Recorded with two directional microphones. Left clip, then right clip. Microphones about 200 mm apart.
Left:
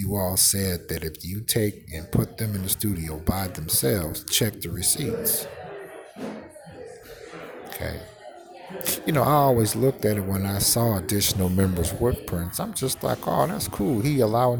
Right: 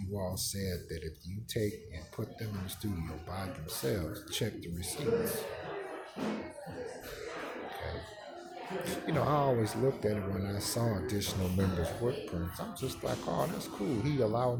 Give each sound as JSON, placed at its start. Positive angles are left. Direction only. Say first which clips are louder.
{"t": 0.1, "sound": "speech", "louder": "left 13 dB", "side_deg": 35}
{"t": 8.8, "sound": "speech", "louder": "left 10 dB", "side_deg": 35}